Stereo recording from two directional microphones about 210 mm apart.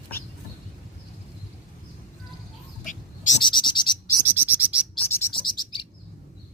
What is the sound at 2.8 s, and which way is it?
Bird, 35° left (ahead or behind).